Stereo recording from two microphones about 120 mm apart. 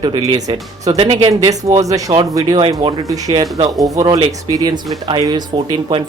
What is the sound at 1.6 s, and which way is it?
Speech, 30° right (ahead or behind).